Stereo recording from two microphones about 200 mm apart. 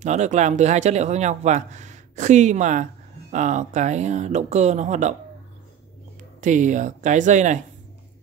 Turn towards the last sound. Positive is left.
turn(degrees=-35)  # may be behind; listen again after turning